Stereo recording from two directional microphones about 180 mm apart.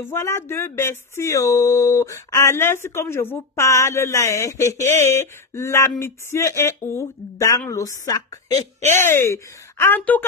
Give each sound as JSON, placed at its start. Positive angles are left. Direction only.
{"t": 0.1, "sound": "speech", "side_deg": 15}